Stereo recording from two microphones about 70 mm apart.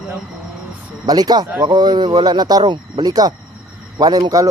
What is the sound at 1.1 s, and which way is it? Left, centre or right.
Speech, right.